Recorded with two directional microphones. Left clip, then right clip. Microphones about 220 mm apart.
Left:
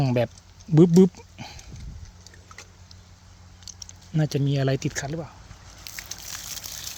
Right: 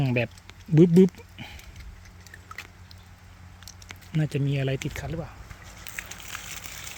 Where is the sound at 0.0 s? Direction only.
10° left (ahead or behind).